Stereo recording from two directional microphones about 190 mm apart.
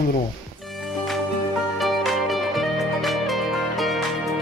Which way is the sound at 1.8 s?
Centre (ahead or behind).